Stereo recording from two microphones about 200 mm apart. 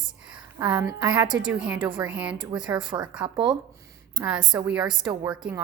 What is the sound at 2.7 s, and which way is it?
Speech, 20° right (ahead or behind).